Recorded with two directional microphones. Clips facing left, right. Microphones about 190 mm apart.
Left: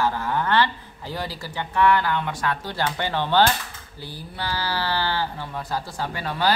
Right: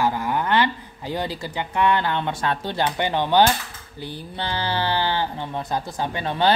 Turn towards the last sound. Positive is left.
turn(degrees=-25)  # may be behind; listen again after turning